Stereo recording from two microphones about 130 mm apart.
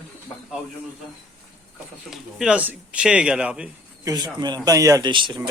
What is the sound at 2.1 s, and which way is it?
Speech, 5° right (ahead or behind).